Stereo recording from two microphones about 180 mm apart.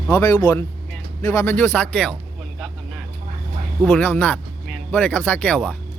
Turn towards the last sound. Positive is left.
turn(degrees=5)  # may be behind; listen again after turning